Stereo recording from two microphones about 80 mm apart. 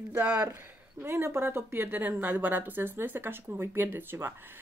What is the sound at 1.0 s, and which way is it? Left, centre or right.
A woman's voice, right.